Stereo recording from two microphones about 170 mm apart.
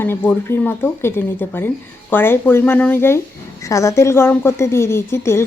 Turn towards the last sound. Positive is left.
turn(degrees=15)  # may be behind; listen again after turning